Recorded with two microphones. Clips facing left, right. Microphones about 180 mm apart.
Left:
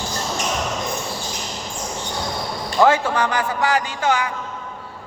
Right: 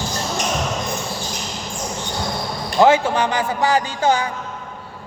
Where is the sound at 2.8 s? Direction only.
25° right (ahead or behind).